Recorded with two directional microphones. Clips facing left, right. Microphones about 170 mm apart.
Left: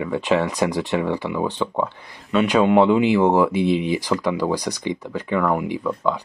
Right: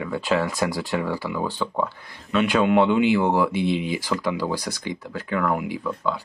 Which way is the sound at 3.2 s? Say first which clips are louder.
Left 4 dB; 35° left (ahead or behind).